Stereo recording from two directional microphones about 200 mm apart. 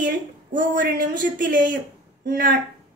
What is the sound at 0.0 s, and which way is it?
A woman's voice, 40° right (ahead or behind).